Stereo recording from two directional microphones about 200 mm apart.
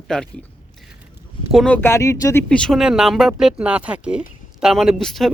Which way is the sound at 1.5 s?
5° left (ahead or behind).